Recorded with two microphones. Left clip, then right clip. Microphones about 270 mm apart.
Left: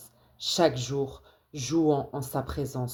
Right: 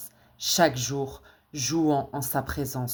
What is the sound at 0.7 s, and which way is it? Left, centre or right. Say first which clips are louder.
Speech: even; right.